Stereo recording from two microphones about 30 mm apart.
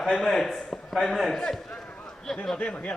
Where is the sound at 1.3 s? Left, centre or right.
Centre.